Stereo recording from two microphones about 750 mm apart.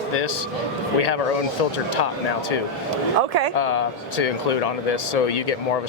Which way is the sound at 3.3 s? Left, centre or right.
Right.